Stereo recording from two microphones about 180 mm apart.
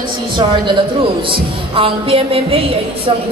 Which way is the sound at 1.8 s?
30° right (ahead or behind).